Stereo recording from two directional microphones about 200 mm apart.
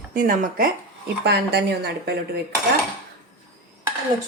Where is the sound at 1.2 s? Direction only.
55° right (ahead or behind).